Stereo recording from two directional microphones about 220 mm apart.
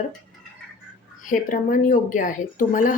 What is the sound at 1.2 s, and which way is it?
A woman's voice, 35° left (ahead or behind).